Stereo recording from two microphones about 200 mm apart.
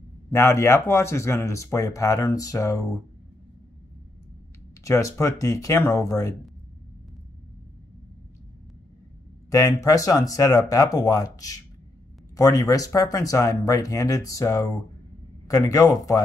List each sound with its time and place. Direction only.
0.3 s speech: 15° left (ahead or behind)
4.8 s speech: 15° left (ahead or behind)
9.5 s speech: 15° left (ahead or behind)